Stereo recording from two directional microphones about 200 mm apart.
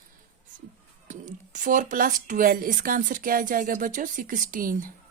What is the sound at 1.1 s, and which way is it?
A woman's voice, 40° right (ahead or behind).